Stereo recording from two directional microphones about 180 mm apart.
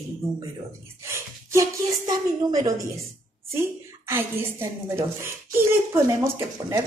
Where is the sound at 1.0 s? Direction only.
15° right (ahead or behind).